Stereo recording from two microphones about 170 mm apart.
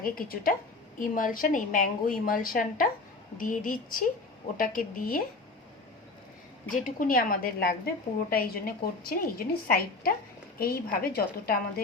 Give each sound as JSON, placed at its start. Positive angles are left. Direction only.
{"t": 0.0, "sound": "a woman's voice", "side_deg": 60}
{"t": 6.7, "sound": "a woman's voice", "side_deg": 55}